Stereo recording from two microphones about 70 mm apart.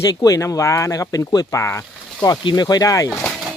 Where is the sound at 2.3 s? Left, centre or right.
Left.